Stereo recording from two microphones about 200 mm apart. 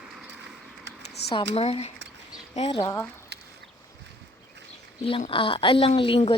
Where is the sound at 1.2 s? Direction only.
55° left (ahead or behind).